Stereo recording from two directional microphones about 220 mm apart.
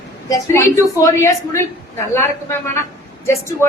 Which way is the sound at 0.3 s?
15° left (ahead or behind).